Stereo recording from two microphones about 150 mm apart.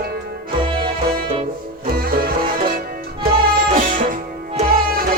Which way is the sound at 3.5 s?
70° right (ahead or behind).